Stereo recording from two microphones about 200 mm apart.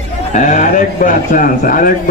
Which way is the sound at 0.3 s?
40° left (ahead or behind).